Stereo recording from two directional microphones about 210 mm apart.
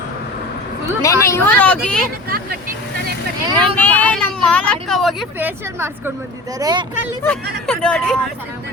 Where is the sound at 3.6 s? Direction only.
10° left (ahead or behind); by 6.8 s 20° right (ahead or behind).